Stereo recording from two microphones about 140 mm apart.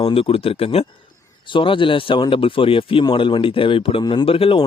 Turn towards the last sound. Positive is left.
turn(degrees=40)  # may be behind; listen again after turning